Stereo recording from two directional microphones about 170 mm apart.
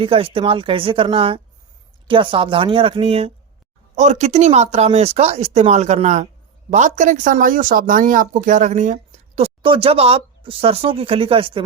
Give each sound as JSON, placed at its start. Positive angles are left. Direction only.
{"t": 0.0, "sound": "speech", "side_deg": -35}